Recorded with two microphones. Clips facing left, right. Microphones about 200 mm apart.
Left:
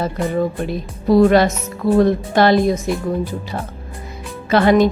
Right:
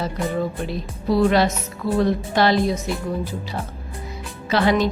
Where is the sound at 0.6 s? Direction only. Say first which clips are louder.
Left 4 dB; 50° left (ahead or behind).